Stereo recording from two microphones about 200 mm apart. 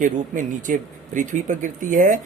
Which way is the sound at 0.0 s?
40° right (ahead or behind).